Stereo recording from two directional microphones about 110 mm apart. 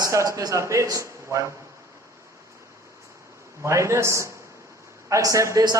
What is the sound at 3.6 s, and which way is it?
A woman's voice, 25° right (ahead or behind).